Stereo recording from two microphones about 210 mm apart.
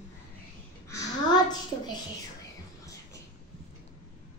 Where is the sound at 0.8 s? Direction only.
15° left (ahead or behind).